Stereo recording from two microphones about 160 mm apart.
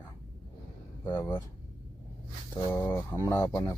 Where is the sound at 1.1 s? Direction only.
25° left (ahead or behind).